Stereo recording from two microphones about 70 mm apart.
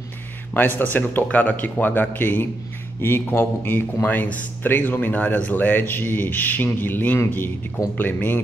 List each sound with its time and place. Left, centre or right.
0.6 s speech: left